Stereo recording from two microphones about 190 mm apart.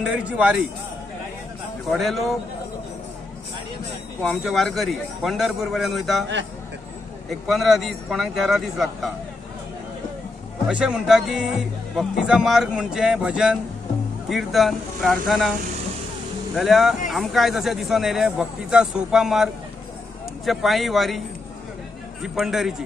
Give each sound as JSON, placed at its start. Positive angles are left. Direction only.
{"t": 0.0, "sound": "speech", "side_deg": -5}
{"t": 1.9, "sound": "speech", "side_deg": 0}
{"t": 4.2, "sound": "speech", "side_deg": 0}
{"t": 7.2, "sound": "speech", "side_deg": 0}
{"t": 10.7, "sound": "speech", "side_deg": -5}
{"t": 16.5, "sound": "speech", "side_deg": 0}
{"t": 22.2, "sound": "speech", "side_deg": 0}